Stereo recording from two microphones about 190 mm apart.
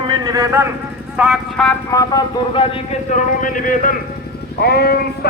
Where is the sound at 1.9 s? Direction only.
20° left (ahead or behind).